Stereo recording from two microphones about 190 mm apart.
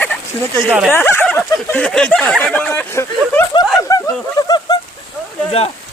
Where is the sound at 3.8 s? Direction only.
20° left (ahead or behind).